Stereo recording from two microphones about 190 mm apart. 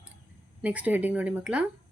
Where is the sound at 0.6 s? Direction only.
10° right (ahead or behind).